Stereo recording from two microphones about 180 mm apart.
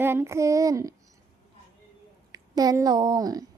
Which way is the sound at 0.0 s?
15° right (ahead or behind).